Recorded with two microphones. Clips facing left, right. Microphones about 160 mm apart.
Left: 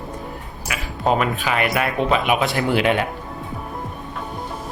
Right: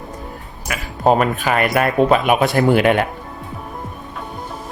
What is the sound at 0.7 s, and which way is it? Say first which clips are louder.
Speech: right 5 dB; 45° right (ahead or behind).